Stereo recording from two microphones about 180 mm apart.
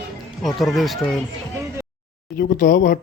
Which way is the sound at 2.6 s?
50° left (ahead or behind).